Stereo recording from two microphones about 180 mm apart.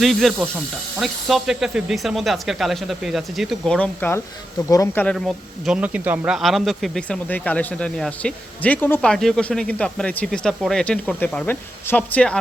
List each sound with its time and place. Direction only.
0.0 s speech: centre (ahead or behind); by 5.0 s 20° left (ahead or behind)
5.0 s speech: centre (ahead or behind)